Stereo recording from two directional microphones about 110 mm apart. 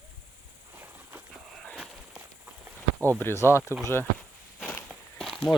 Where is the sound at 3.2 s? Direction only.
20° left (ahead or behind).